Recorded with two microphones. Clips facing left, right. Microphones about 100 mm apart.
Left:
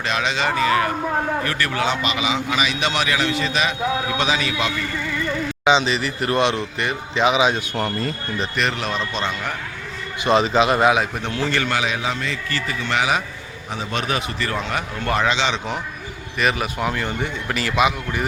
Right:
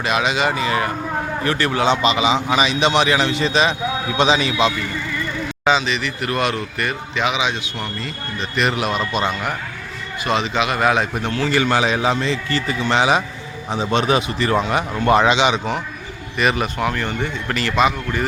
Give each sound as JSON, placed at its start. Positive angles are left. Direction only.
{"t": 0.0, "sound": "a man's voice", "side_deg": -10}
{"t": 5.8, "sound": "a man's voice", "side_deg": 35}
{"t": 8.5, "sound": "speech", "side_deg": -10}
{"t": 10.2, "sound": "a man's voice", "side_deg": 35}
{"t": 10.8, "sound": "a man's voice", "side_deg": 5}
{"t": 11.7, "sound": "a man's voice", "side_deg": -30}
{"t": 16.4, "sound": "a man's voice", "side_deg": 0}